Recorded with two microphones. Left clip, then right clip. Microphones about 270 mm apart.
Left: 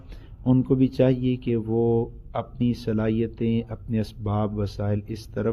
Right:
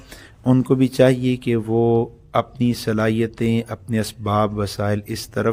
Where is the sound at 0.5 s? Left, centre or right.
Right.